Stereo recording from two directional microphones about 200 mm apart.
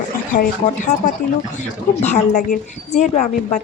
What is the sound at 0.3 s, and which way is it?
A woman's voice, 40° left (ahead or behind).